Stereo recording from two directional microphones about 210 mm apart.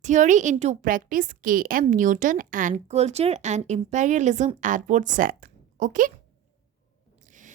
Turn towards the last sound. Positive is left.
turn(degrees=-40)  # may be behind; listen again after turning